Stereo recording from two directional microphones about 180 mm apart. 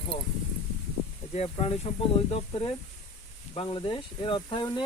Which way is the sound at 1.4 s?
35° left (ahead or behind).